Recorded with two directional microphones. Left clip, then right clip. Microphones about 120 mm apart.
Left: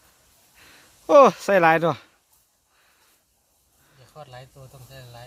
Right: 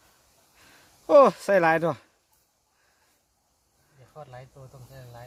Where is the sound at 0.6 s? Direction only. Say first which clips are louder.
Left 4 dB; 25° left (ahead or behind).